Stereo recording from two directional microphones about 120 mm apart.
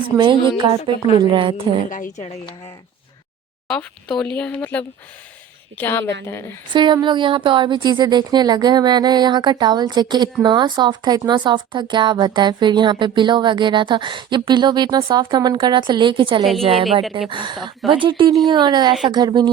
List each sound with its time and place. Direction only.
0.2 s a woman's voice: 40° right (ahead or behind)
1.9 s a woman's voice: 90° left
3.7 s a woman's voice: 10° left (ahead or behind)
6.7 s a woman's voice: 40° right (ahead or behind)
16.4 s a woman's voice: centre (ahead or behind)
17.2 s a woman's voice: 40° right (ahead or behind)